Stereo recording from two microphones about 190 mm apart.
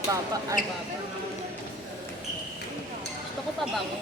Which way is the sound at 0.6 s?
45° left (ahead or behind).